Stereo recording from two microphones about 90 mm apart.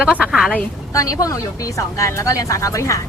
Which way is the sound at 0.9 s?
40° left (ahead or behind).